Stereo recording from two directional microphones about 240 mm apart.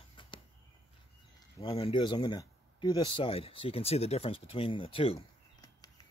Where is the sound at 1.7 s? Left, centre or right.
Centre.